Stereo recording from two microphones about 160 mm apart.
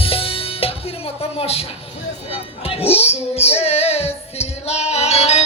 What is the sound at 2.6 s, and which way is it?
Music, 35° left (ahead or behind).